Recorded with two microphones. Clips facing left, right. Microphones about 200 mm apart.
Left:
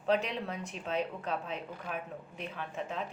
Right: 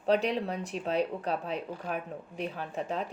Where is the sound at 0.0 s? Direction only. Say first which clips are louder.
Right 4 dB; 35° right (ahead or behind).